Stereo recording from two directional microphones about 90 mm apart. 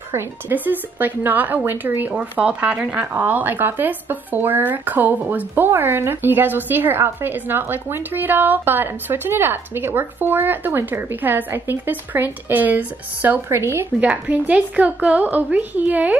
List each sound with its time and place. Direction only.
0.1 s a woman's voice: 20° right (ahead or behind)